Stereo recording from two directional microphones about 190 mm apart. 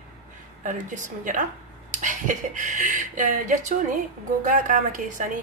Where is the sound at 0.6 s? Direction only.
40° right (ahead or behind).